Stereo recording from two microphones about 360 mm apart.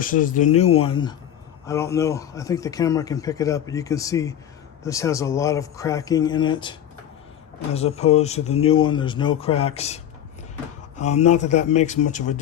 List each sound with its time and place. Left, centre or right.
0.0 s speech: left